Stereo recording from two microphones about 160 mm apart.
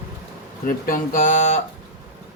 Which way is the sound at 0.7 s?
60° left (ahead or behind).